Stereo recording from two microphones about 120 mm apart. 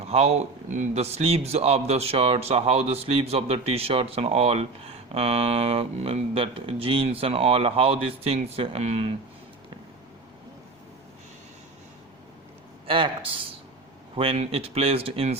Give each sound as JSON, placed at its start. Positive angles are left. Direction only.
{"t": 0.0, "sound": "speech", "side_deg": -60}
{"t": 14.2, "sound": "speech", "side_deg": -55}